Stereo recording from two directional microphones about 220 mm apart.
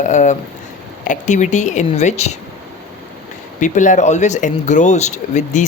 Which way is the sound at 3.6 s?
35° left (ahead or behind).